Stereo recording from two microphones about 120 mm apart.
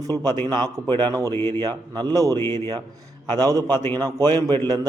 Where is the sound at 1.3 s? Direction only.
20° left (ahead or behind).